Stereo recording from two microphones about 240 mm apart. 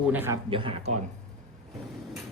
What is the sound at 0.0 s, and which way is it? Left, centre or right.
Speech, centre.